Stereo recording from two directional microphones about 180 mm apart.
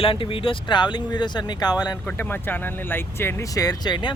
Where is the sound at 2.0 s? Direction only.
10° left (ahead or behind).